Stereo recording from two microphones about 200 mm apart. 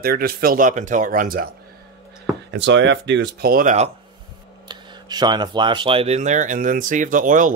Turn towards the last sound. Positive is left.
turn(degrees=-40)  # may be behind; listen again after turning